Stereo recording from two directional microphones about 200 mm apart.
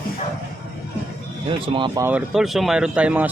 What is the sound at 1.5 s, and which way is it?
Speech, 25° right (ahead or behind).